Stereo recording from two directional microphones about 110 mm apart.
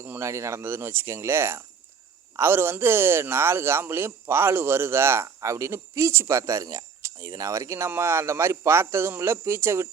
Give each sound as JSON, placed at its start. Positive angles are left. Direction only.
{"t": 0.0, "sound": "a man's voice", "side_deg": -25}